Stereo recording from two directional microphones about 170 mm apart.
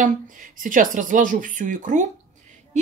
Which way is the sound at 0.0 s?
50° right (ahead or behind).